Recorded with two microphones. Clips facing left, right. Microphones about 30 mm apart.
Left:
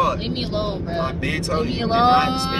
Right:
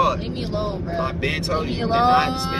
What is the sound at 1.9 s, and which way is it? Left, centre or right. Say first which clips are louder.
Speech: left 1 dB; left.